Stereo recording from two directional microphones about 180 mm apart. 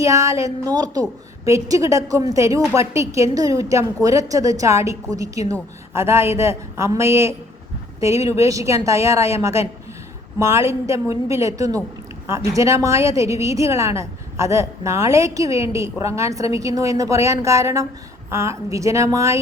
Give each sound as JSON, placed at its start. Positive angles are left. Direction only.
{"t": 0.0, "sound": "a woman's voice", "side_deg": -15}